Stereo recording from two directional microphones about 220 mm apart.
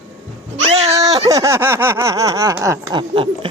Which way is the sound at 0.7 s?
25° right (ahead or behind).